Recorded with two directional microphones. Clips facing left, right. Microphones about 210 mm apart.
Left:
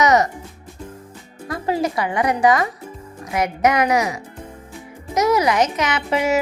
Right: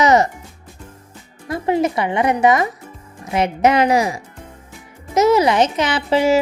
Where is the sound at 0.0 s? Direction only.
30° right (ahead or behind).